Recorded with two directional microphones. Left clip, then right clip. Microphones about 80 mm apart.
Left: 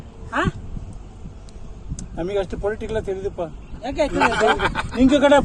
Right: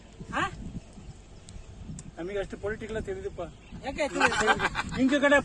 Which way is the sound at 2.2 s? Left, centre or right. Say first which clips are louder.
Left 10 dB; left.